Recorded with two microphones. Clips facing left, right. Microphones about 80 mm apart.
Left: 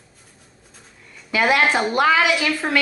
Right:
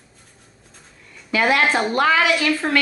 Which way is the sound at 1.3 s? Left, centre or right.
Centre.